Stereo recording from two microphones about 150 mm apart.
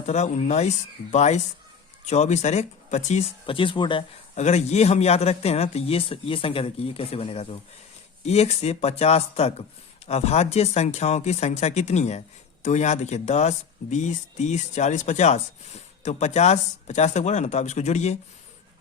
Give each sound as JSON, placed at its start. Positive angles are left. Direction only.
{"t": 0.0, "sound": "speech", "side_deg": 50}
{"t": 4.4, "sound": "speech", "side_deg": 50}